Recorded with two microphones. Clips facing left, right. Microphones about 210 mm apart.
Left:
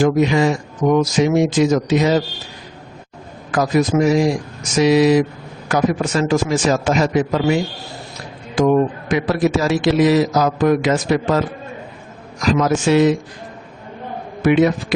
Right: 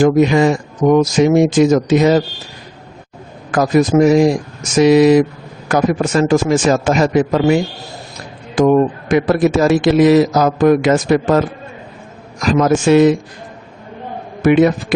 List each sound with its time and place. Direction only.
0.0 s a man's voice: 50° right (ahead or behind)
3.5 s a man's voice: 50° right (ahead or behind)
8.5 s a man's voice: 50° right (ahead or behind)
14.4 s a man's voice: 50° right (ahead or behind)